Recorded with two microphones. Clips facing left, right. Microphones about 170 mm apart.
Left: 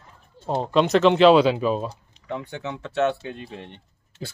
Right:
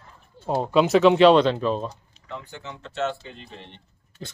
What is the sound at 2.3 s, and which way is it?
Speech, 65° left (ahead or behind).